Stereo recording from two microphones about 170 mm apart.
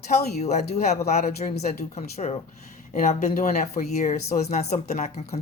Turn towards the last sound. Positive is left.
turn(degrees=40)  # may be behind; listen again after turning